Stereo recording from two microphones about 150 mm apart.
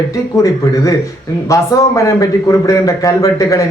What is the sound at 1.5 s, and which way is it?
A man's voice, 20° left (ahead or behind).